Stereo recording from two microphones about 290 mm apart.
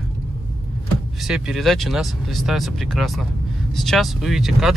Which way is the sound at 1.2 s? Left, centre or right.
Centre.